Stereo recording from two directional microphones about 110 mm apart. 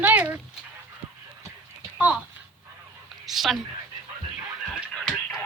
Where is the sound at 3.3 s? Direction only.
Centre (ahead or behind).